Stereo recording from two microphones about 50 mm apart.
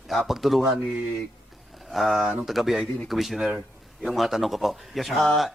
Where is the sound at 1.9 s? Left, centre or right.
Centre.